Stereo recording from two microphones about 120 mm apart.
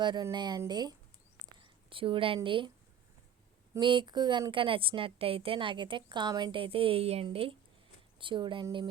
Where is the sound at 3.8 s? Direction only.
40° right (ahead or behind).